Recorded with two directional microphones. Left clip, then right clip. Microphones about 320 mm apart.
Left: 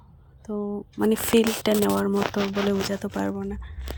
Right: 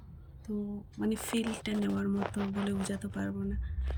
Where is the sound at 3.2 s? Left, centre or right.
Centre.